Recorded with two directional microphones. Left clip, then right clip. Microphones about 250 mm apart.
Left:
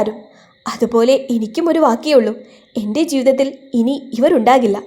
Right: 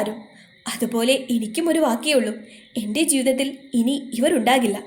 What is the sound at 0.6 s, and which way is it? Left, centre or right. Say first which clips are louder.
A woman's voice: left 9 dB; left.